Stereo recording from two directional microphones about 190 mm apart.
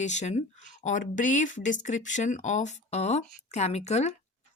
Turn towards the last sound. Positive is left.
turn(degrees=35)  # may be behind; listen again after turning